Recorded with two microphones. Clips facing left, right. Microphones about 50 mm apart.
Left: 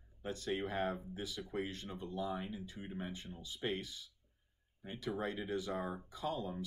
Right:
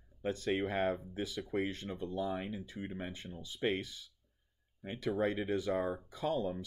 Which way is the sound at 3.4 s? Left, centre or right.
Right.